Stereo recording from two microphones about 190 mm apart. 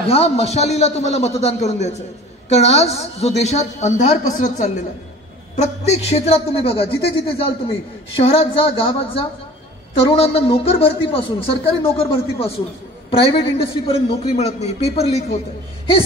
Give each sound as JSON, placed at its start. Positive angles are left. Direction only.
{"t": 0.0, "sound": "a woman's voice", "side_deg": 30}